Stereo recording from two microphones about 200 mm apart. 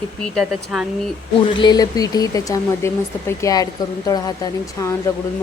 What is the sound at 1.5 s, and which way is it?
Speech, 20° left (ahead or behind).